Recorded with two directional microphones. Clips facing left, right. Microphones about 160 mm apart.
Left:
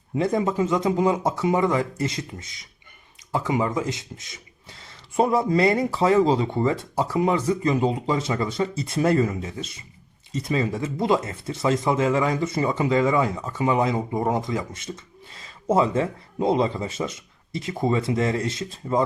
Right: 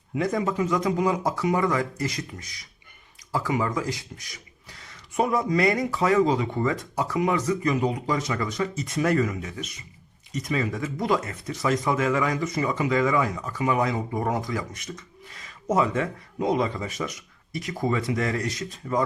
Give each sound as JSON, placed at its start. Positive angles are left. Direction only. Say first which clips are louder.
{"t": 0.1, "sound": "speech", "louder": "left 3 dB", "side_deg": 30}